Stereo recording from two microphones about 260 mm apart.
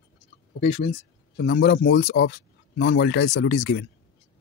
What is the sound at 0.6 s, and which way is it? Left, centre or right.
Speech, left.